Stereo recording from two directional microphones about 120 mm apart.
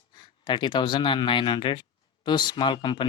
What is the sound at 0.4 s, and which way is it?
Speech, 40° left (ahead or behind).